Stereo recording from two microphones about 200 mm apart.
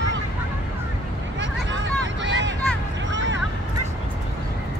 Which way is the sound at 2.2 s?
65° right (ahead or behind).